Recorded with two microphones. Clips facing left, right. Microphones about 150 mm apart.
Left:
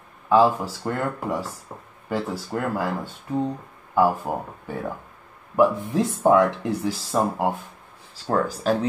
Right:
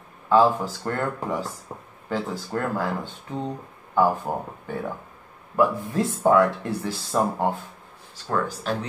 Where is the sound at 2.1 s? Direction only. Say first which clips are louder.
Left 1 dB; 10° left (ahead or behind).